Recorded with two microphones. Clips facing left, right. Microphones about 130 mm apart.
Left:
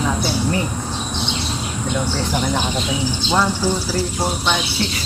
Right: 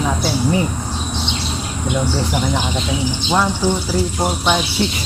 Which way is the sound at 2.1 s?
10° right (ahead or behind).